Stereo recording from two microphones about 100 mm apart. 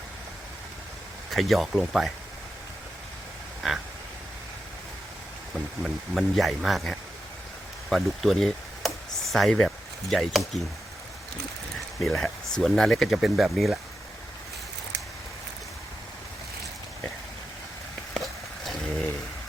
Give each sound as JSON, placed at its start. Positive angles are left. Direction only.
{"t": 1.3, "sound": "speech", "side_deg": 0}
{"t": 5.8, "sound": "speech", "side_deg": 0}
{"t": 11.9, "sound": "speech", "side_deg": 5}
{"t": 18.1, "sound": "a sound", "side_deg": 0}